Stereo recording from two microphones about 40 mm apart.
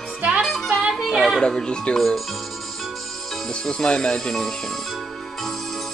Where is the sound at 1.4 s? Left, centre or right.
Centre.